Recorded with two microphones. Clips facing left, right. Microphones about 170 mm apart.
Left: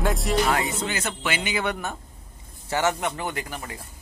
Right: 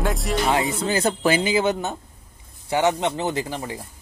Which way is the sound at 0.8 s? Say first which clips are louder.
Right 8 dB; 35° right (ahead or behind).